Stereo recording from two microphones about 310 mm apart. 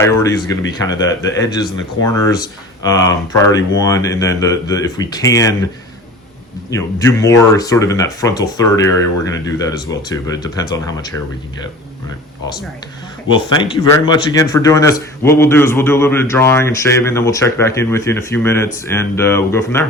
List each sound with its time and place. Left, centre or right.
0.0 s speech: centre
6.7 s speech: centre
13.2 s speech: centre